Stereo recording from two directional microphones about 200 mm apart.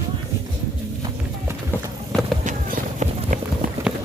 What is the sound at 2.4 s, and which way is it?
Clip-clop, 40° right (ahead or behind).